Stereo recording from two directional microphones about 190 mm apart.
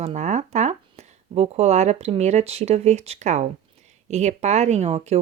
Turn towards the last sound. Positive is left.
turn(degrees=-35)  # may be behind; listen again after turning